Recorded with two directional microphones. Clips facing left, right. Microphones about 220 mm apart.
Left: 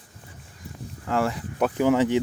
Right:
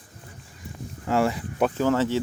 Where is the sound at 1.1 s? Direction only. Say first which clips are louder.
Right 2 dB; 5° right (ahead or behind).